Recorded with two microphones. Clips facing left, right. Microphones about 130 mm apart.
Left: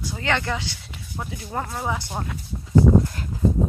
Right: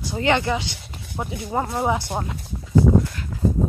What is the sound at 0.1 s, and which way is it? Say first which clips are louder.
Speech: right 5 dB; 20° right (ahead or behind).